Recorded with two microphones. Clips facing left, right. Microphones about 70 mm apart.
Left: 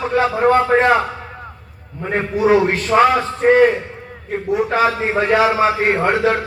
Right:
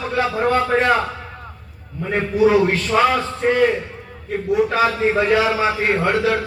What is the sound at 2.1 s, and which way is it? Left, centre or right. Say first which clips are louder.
A man's voice: left 1 dB; left.